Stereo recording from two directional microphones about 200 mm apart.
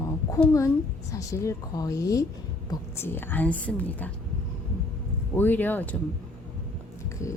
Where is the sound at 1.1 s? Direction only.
15° left (ahead or behind).